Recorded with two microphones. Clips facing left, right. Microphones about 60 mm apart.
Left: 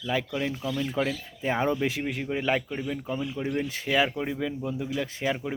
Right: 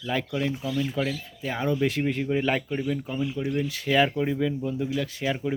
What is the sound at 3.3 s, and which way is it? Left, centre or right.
Speech, left.